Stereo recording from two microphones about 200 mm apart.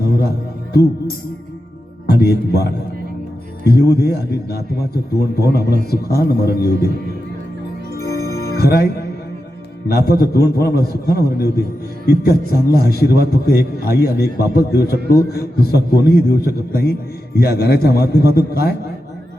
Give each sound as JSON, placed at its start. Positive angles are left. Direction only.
{"t": 2.0, "sound": "a man's voice", "side_deg": 50}
{"t": 7.9, "sound": "music", "side_deg": 50}
{"t": 10.1, "sound": "a man's voice", "side_deg": 50}